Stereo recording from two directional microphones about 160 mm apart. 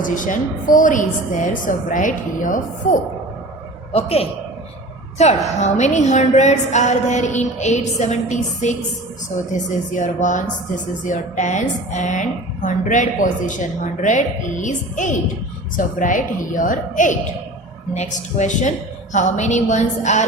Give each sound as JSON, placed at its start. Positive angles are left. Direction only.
{"t": 0.0, "sound": "a woman's voice", "side_deg": 55}
{"t": 3.9, "sound": "a woman's voice", "side_deg": 40}